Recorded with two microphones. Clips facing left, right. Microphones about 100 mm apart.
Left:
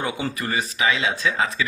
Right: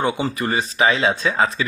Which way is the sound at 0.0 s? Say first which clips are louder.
Right 5 dB; 30° right (ahead or behind).